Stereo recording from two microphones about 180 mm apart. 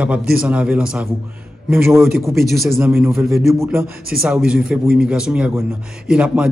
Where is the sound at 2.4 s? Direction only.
Centre (ahead or behind).